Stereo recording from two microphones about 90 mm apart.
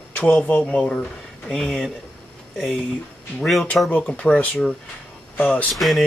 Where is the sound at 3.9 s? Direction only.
15° left (ahead or behind).